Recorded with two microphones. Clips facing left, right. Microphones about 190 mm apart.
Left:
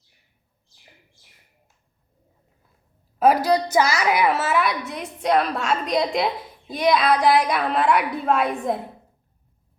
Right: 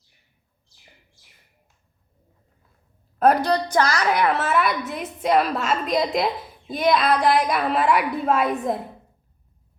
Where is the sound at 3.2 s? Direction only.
5° left (ahead or behind).